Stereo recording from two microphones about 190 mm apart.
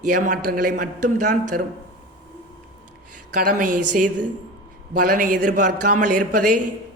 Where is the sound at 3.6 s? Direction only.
45° right (ahead or behind).